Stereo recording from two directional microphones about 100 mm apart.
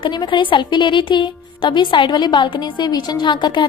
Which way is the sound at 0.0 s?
50° left (ahead or behind).